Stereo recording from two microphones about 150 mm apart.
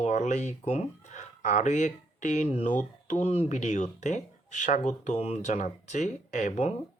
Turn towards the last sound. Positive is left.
turn(degrees=50)  # may be behind; listen again after turning